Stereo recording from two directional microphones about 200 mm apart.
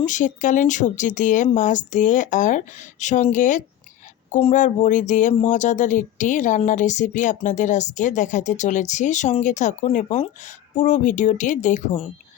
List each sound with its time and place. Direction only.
0.0 s speech: 40° left (ahead or behind)